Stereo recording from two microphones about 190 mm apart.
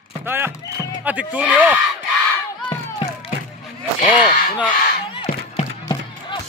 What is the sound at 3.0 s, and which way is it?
Music, 25° left (ahead or behind).